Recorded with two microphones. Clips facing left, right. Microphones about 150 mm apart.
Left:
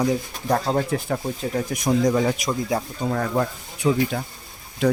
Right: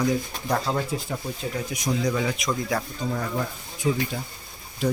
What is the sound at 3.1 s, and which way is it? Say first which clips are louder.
Speech: left 6 dB; 60° left (ahead or behind).